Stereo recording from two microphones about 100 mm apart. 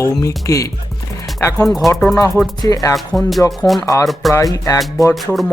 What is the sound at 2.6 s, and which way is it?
Speech, 35° left (ahead or behind).